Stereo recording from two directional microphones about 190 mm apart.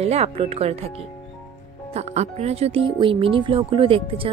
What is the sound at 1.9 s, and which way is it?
A woman's voice, 35° right (ahead or behind).